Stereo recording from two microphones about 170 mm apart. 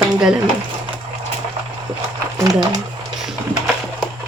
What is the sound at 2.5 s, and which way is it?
Speech, 25° right (ahead or behind).